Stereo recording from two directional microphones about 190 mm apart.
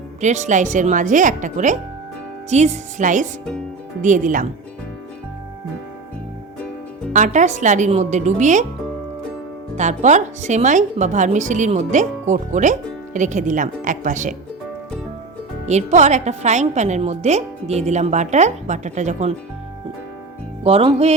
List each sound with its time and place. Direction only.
0.2 s a woman's voice: 40° right (ahead or behind)
7.1 s a woman's voice: 40° right (ahead or behind)
9.7 s a woman's voice: 40° right (ahead or behind)
15.6 s a woman's voice: 35° right (ahead or behind)
20.7 s a woman's voice: 30° right (ahead or behind)